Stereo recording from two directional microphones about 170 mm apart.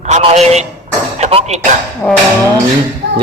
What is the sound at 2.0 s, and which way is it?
Speech, 10° left (ahead or behind).